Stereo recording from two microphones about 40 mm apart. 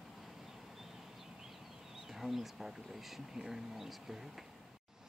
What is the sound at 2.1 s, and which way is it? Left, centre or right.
Speech, centre.